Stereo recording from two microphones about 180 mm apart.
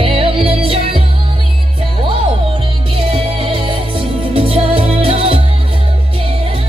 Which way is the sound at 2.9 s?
30° right (ahead or behind).